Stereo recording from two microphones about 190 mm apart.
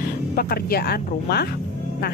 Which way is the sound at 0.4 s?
50° left (ahead or behind).